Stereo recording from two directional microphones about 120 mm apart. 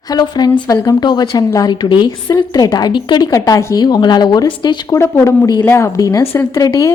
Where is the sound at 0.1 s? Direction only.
35° left (ahead or behind).